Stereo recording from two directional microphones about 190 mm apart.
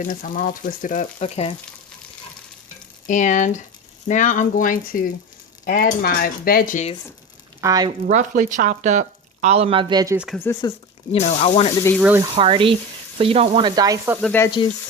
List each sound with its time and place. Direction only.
0.0 s speech: 45° left (ahead or behind)
3.1 s speech: 40° left (ahead or behind)
7.6 s frying: 20° right (ahead or behind)
8.0 s speech: 45° right (ahead or behind); by 10.2 s 20° right (ahead or behind)
10.3 s speech: 15° left (ahead or behind)
10.7 s speech: 35° left (ahead or behind)
12.3 s frying: 30° right (ahead or behind)
14.2 s speech: 10° left (ahead or behind)